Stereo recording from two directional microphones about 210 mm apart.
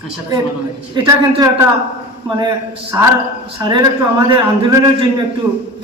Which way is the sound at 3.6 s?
20° right (ahead or behind).